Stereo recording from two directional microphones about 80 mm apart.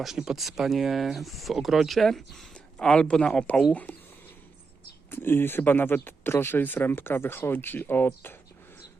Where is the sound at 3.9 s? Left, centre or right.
Centre.